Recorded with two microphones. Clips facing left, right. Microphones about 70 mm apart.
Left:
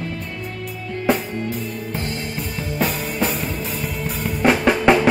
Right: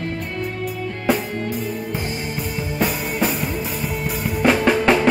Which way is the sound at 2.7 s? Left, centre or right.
Centre.